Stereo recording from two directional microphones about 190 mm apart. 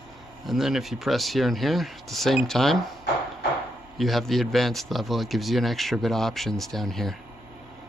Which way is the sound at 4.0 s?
Centre (ahead or behind).